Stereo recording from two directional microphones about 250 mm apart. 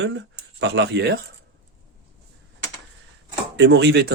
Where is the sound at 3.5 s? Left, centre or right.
Right.